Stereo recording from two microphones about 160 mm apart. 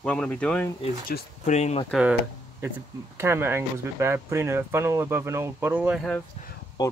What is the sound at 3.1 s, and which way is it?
Speech, 15° right (ahead or behind).